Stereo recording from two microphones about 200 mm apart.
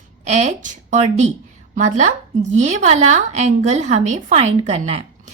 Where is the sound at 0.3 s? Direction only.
35° right (ahead or behind).